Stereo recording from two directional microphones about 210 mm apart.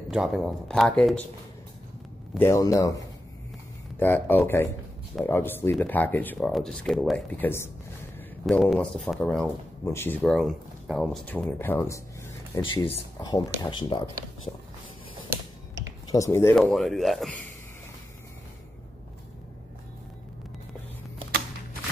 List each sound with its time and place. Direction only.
0.1 s speech: centre (ahead or behind)
2.3 s speech: 15° left (ahead or behind)
15.2 s a sound: 15° right (ahead or behind)
16.1 s speech: 15° left (ahead or behind)
16.6 s speech: centre (ahead or behind)